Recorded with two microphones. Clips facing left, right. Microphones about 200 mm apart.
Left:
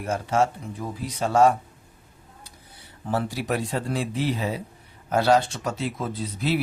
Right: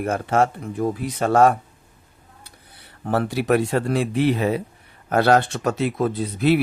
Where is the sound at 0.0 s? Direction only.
60° right (ahead or behind).